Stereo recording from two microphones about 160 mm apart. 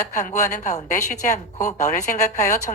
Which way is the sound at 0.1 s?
50° left (ahead or behind).